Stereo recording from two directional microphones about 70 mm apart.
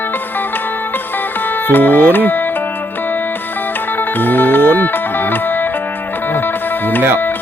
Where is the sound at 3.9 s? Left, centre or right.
Left.